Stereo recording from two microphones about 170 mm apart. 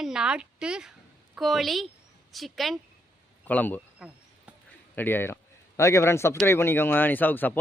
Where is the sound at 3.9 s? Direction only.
5° right (ahead or behind).